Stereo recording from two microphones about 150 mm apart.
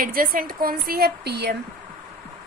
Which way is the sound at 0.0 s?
70° right (ahead or behind).